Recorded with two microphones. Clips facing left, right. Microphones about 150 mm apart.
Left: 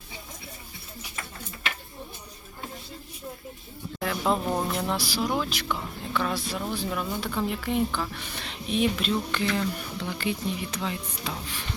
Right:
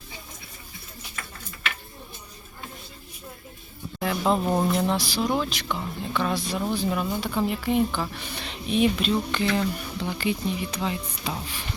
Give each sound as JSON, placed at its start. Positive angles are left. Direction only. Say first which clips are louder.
{"t": 1.1, "sound": "tick-tock", "louder": "left 1 dB", "side_deg": 25}
{"t": 4.0, "sound": "music", "louder": "right 3 dB", "side_deg": -5}
{"t": 4.7, "sound": "speech", "louder": "right 4 dB", "side_deg": 5}